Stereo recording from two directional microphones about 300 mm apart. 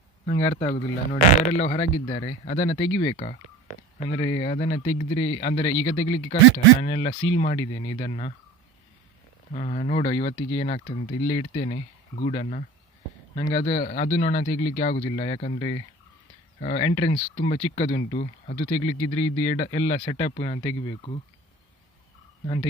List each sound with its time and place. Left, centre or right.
0.3 s speech: centre
0.5 s speech: left
9.5 s speech: left
19.0 s speech: centre